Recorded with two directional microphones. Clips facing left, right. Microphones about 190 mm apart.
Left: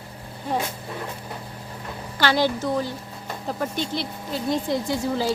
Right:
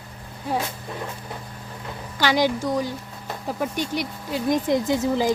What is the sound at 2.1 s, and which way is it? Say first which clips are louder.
Speech: right 1 dB; 15° right (ahead or behind).